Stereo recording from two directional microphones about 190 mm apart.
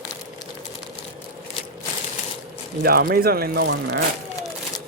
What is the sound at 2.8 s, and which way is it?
Speech, 55° right (ahead or behind).